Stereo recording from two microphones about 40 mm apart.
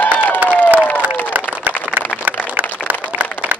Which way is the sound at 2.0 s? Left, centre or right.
Right.